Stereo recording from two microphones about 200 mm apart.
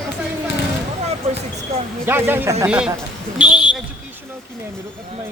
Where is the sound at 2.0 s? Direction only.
10° right (ahead or behind).